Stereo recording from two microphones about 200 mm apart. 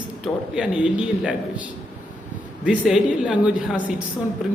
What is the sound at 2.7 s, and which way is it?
Speech, 5° right (ahead or behind).